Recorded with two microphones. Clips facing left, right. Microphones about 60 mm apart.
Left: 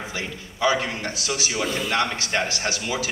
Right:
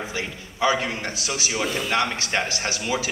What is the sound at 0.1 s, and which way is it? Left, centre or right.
A man's voice, right.